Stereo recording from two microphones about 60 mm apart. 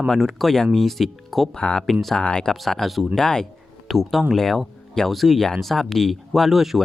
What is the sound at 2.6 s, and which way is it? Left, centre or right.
Speech, centre.